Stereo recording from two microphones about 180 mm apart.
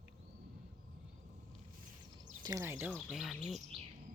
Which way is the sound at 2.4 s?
20° right (ahead or behind).